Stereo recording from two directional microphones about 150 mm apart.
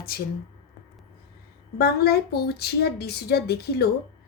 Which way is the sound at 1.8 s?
90° left.